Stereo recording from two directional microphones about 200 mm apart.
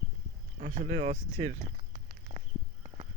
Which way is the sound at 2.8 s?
30° right (ahead or behind).